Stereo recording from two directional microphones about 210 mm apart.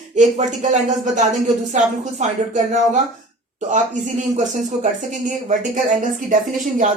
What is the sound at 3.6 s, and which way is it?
Speech, 35° right (ahead or behind).